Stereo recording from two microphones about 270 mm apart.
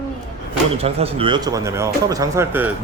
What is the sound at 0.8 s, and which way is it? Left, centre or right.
Speech, right.